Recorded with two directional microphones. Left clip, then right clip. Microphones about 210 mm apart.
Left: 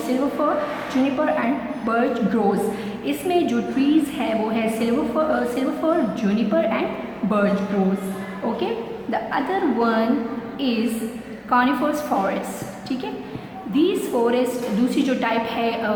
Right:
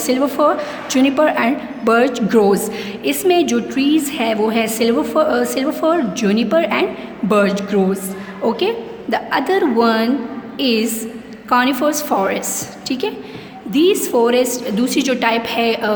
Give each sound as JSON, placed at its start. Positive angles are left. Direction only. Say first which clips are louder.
{"t": 0.1, "sound": "a woman's voice", "louder": "right 7 dB", "side_deg": -50}
{"t": 13.7, "sound": "a woman's voice", "louder": "right 6 dB", "side_deg": -50}